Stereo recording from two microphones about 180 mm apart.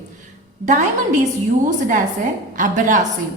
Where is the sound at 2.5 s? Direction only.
45° right (ahead or behind).